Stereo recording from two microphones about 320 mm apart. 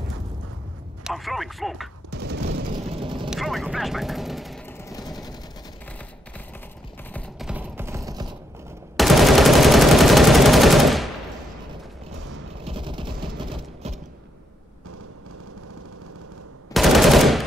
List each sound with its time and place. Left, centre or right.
1.0 s speech: centre
2.0 s a sound: right
2.9 s vehicle: centre
3.3 s vehicle: centre
7.1 s typing: centre
8.9 s gunshot: centre
12.6 s vehicle: centre
16.7 s machine gun: centre